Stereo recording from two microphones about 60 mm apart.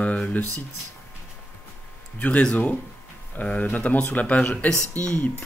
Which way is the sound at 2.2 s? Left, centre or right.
Left.